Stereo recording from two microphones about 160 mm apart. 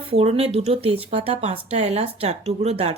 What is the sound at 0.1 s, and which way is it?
Speech, 40° right (ahead or behind).